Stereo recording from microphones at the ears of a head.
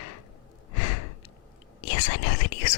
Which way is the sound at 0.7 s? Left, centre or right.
Left.